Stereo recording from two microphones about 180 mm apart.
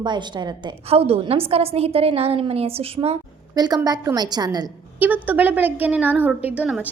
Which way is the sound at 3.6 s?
20° right (ahead or behind).